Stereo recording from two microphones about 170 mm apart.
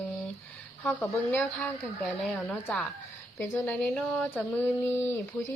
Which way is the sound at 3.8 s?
Centre (ahead or behind).